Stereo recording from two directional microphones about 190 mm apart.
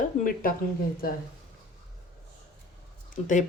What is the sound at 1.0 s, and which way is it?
Speech, 50° left (ahead or behind).